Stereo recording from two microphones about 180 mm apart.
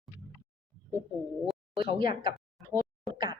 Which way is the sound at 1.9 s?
25° right (ahead or behind).